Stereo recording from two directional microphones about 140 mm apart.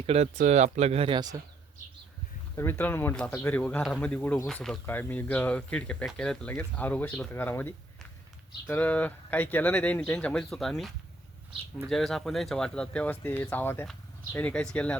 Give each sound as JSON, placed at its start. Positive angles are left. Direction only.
{"t": 0.0, "sound": "speech", "side_deg": -50}
{"t": 2.6, "sound": "speech", "side_deg": 15}